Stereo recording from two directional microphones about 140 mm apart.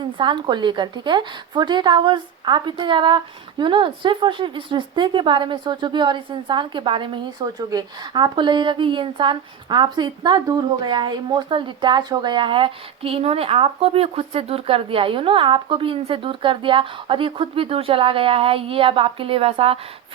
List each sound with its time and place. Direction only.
0.0 s a woman's voice: 35° right (ahead or behind)